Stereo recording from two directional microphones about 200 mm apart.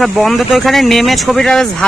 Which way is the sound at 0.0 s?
Centre (ahead or behind).